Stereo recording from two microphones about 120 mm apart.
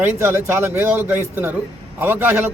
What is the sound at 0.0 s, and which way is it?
A man's voice, 20° right (ahead or behind).